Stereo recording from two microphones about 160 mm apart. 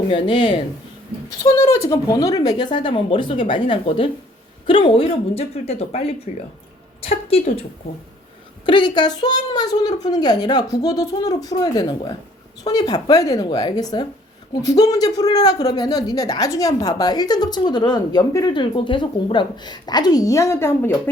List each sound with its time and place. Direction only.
0.1 s speech: 30° left (ahead or behind)
1.5 s a woman's voice: 20° left (ahead or behind); by 7.6 s 40° left (ahead or behind)
8.6 s speech: 30° left (ahead or behind)